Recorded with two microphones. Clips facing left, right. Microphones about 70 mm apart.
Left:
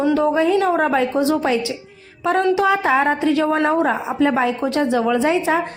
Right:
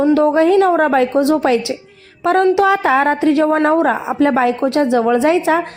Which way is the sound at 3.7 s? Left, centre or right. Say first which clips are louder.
Right 4 dB; right.